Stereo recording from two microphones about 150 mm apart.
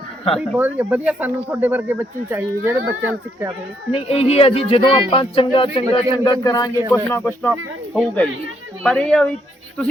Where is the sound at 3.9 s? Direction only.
40° left (ahead or behind).